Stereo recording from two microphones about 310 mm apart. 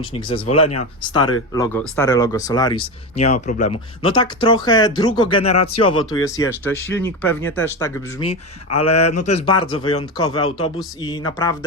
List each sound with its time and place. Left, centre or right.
0.0 s speech: centre